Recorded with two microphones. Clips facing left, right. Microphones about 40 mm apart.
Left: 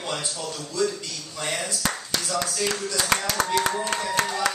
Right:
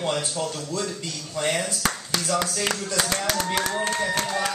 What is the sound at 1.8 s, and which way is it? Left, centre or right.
Speech, right.